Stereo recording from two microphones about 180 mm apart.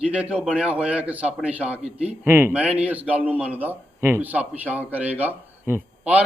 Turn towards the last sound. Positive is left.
turn(degrees=-10)  # may be behind; listen again after turning